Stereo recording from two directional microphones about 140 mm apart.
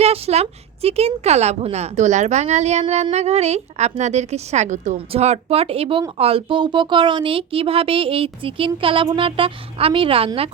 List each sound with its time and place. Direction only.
0.0 s a woman's voice: 50° right (ahead or behind)
4.9 s speech: 50° right (ahead or behind)